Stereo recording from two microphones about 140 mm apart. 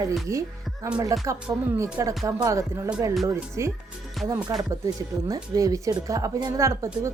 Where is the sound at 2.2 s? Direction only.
25° right (ahead or behind).